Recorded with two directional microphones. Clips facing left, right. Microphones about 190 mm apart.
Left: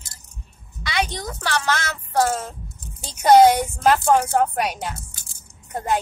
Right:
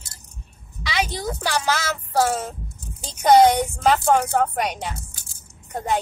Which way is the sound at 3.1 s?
10° left (ahead or behind).